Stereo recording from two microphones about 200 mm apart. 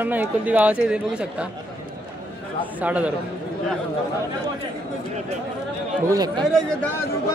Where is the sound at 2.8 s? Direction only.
5° right (ahead or behind).